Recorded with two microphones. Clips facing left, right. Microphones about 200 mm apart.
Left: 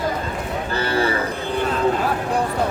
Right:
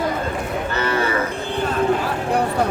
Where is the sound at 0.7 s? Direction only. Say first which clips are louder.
Left 1 dB; 30° left (ahead or behind).